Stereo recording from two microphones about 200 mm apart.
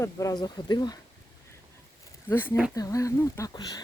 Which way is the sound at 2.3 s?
10° left (ahead or behind).